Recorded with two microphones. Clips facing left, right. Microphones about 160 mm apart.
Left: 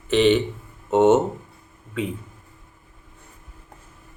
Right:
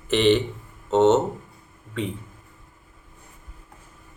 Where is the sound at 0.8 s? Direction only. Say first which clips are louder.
Left 1 dB; 10° left (ahead or behind).